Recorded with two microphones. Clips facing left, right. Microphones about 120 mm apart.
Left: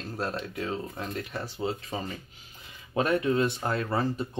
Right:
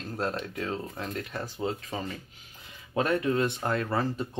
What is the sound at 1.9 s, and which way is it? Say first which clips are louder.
Speech: even; 25° left (ahead or behind).